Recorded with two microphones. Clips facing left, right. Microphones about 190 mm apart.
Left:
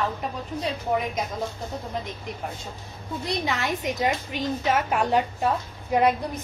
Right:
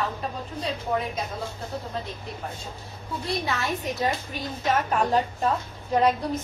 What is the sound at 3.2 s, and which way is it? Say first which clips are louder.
A woman's voice: left 1 dB; 15° left (ahead or behind).